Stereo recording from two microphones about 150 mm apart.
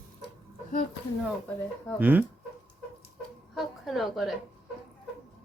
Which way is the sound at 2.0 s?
10° right (ahead or behind).